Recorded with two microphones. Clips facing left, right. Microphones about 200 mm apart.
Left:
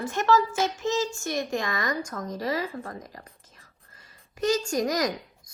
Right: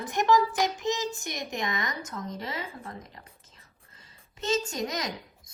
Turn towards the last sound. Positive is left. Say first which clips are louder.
# left 7 dB
turn(degrees=-25)  # may be behind; listen again after turning